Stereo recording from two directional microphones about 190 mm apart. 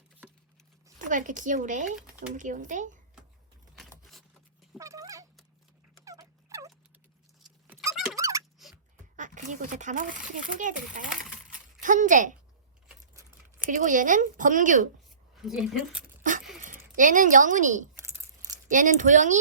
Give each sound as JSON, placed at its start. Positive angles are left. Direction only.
{"t": 0.9, "sound": "speech", "side_deg": -40}
{"t": 3.8, "sound": "keys jangling", "side_deg": 0}
{"t": 4.8, "sound": "cat", "side_deg": -15}
{"t": 6.1, "sound": "turkey", "side_deg": -15}
{"t": 8.1, "sound": "a sound", "side_deg": -15}
{"t": 9.1, "sound": "a child's voice", "side_deg": -40}
{"t": 11.3, "sound": "coin", "side_deg": -45}
{"t": 13.7, "sound": "a child's voice", "side_deg": -45}
{"t": 15.4, "sound": "speech", "side_deg": 0}
{"t": 16.6, "sound": "speech", "side_deg": -45}
{"t": 17.9, "sound": "a sound", "side_deg": -20}
{"t": 18.7, "sound": "speech", "side_deg": -40}